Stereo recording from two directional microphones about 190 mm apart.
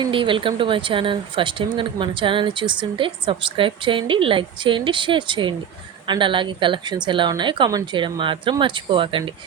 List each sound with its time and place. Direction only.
0.0 s speech: 25° right (ahead or behind)